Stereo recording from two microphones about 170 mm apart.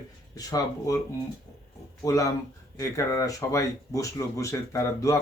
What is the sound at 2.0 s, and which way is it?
Speech, 20° left (ahead or behind).